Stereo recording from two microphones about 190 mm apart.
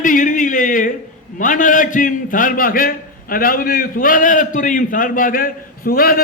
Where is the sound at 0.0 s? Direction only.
45° left (ahead or behind).